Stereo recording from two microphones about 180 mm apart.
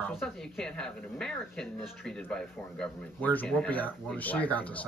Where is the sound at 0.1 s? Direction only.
Centre (ahead or behind).